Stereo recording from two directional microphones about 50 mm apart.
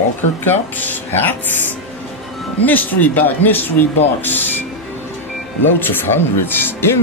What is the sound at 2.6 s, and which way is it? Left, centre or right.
Speech, left.